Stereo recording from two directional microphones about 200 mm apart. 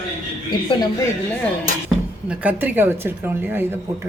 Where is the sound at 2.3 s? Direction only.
10° right (ahead or behind).